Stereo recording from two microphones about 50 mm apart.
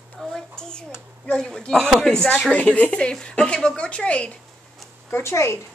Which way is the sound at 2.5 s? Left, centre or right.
Left.